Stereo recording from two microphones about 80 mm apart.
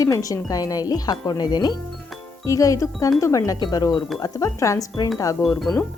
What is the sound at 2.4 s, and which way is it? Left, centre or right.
Speech, left.